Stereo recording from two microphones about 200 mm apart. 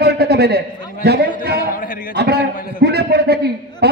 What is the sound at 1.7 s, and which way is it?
Speech, 45° left (ahead or behind).